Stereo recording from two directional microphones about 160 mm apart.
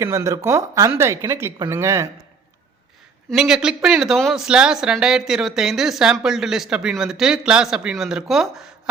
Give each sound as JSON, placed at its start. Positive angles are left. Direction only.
{"t": 0.0, "sound": "speech", "side_deg": -15}
{"t": 3.2, "sound": "speech", "side_deg": -5}